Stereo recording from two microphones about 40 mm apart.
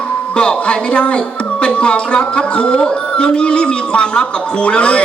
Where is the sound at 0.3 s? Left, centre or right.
Left.